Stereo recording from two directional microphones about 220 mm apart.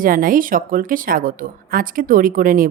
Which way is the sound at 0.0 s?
40° right (ahead or behind).